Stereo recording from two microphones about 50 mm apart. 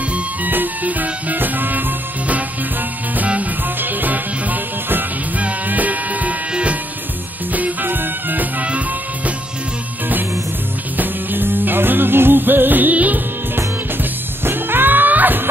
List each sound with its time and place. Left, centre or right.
0.1 s music: right
7.5 s music: right
11.0 s music: right
14.4 s music: right